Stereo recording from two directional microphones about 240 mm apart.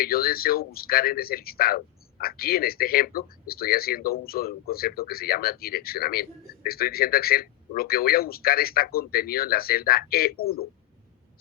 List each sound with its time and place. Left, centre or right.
0.0 s speech: left